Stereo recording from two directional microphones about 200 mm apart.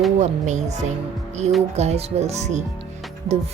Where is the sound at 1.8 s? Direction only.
35° right (ahead or behind).